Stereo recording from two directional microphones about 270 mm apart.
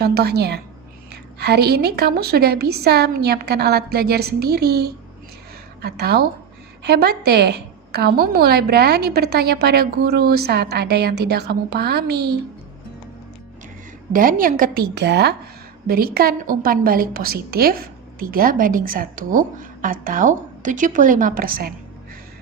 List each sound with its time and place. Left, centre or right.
0.0 s a woman's voice: right
14.1 s a woman's voice: right